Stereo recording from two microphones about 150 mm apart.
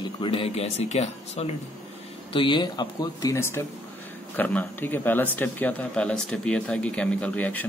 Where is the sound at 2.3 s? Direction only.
35° left (ahead or behind); by 7.7 s 10° left (ahead or behind).